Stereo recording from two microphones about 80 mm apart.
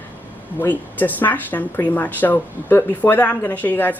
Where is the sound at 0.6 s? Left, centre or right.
Left.